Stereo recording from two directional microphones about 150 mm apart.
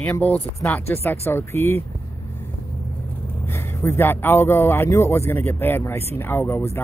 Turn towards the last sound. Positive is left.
turn(degrees=15)  # may be behind; listen again after turning